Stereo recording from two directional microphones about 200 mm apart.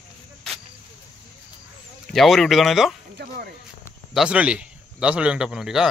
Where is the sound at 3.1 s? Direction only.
50° right (ahead or behind).